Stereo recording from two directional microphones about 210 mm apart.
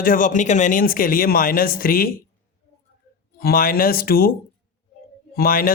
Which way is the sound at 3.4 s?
45° left (ahead or behind).